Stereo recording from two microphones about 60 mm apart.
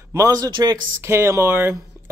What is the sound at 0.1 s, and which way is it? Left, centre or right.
Speech, right.